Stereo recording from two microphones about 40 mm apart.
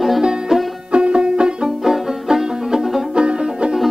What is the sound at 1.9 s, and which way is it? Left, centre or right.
Music, centre.